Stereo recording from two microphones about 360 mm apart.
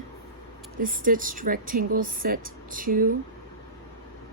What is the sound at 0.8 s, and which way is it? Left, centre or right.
Speech, right.